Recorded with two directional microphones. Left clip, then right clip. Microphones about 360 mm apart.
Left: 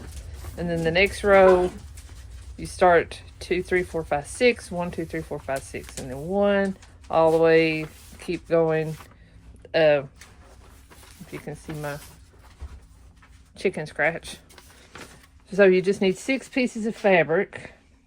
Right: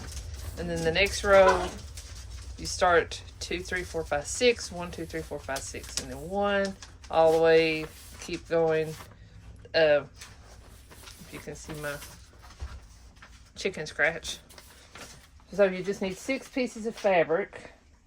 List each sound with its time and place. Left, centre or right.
0.7 s speech: left
2.6 s speech: left
11.3 s speech: centre
13.6 s speech: centre
15.5 s speech: left